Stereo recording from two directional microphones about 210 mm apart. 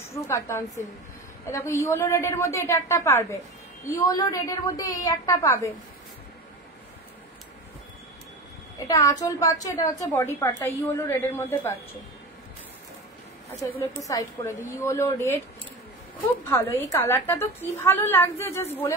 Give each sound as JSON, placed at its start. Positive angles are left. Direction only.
{"t": 0.0, "sound": "a woman's voice", "side_deg": 15}
{"t": 8.7, "sound": "a woman's voice", "side_deg": 15}
{"t": 13.6, "sound": "a woman's voice", "side_deg": 10}
{"t": 16.7, "sound": "a woman's voice", "side_deg": 10}